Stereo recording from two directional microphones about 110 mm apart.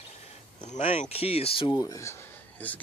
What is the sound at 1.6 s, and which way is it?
Speech, 40° left (ahead or behind).